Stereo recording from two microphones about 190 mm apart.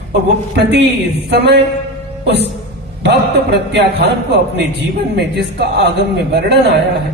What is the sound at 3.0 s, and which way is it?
A man's voice, 60° right (ahead or behind).